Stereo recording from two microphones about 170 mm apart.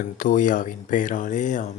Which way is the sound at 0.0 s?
50° left (ahead or behind).